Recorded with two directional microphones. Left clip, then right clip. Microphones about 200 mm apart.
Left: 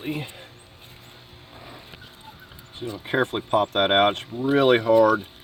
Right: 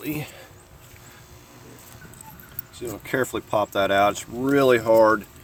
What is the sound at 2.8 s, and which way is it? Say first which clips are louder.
Speech: left 1 dB; 35° right (ahead or behind).